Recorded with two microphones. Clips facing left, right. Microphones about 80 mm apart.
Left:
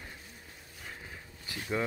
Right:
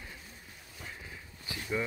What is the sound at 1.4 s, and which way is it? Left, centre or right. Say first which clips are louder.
Speech: left 1 dB; left.